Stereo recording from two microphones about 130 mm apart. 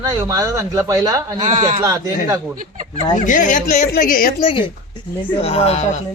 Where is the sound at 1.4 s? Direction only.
65° right (ahead or behind).